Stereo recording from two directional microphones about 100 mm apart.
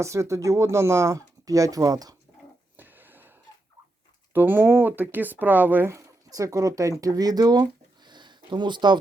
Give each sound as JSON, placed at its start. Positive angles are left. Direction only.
{"t": 0.0, "sound": "speech", "side_deg": -30}
{"t": 2.7, "sound": "a sound", "side_deg": -20}
{"t": 4.3, "sound": "speech", "side_deg": -20}